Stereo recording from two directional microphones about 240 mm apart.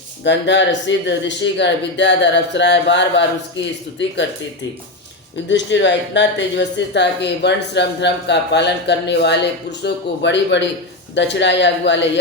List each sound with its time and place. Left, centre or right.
0.3 s a woman's voice: left
5.5 s a woman's voice: left